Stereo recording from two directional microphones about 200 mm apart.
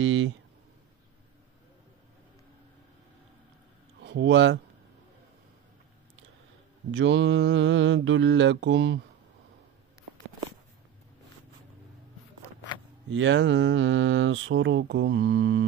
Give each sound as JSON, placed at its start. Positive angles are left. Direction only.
{"t": 0.0, "sound": "a sound", "side_deg": -70}
{"t": 4.0, "sound": "speech", "side_deg": -60}
{"t": 6.9, "sound": "mantra", "side_deg": -65}
{"t": 13.1, "sound": "speech", "side_deg": -65}